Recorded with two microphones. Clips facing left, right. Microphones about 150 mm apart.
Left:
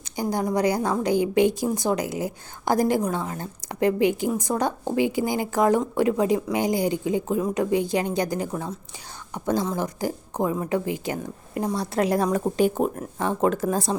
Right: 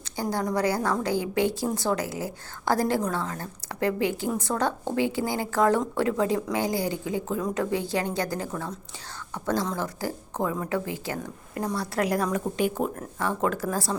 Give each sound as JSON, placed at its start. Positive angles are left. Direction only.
{"t": 0.0, "sound": "a woman's voice", "side_deg": 15}
{"t": 12.8, "sound": "speech", "side_deg": 20}